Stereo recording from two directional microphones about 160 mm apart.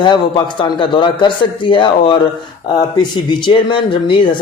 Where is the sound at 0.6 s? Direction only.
30° left (ahead or behind).